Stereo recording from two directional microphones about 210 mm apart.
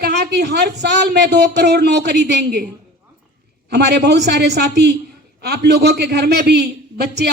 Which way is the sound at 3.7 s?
50° right (ahead or behind).